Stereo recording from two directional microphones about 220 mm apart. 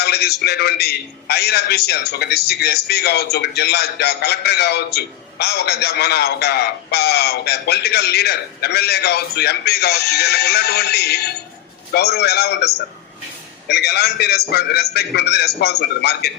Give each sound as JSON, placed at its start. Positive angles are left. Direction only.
{"t": 0.0, "sound": "a man's voice", "side_deg": 45}